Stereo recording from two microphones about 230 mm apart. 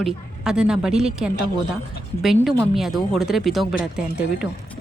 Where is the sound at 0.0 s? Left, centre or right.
Centre.